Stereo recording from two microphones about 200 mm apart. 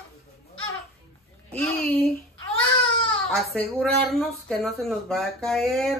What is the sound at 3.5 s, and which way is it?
Speech, 5° left (ahead or behind).